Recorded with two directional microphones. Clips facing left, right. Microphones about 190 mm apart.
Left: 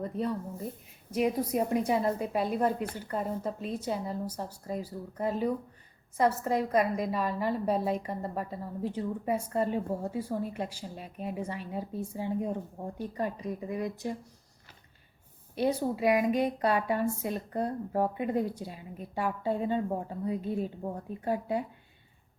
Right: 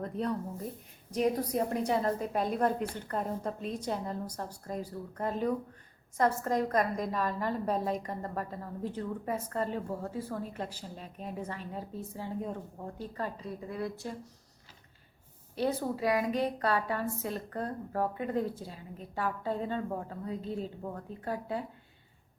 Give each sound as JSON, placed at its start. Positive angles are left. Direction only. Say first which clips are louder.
{"t": 0.0, "sound": "a woman's voice", "louder": "left 1 dB", "side_deg": 5}
{"t": 15.5, "sound": "a woman's voice", "louder": "left 3 dB", "side_deg": 15}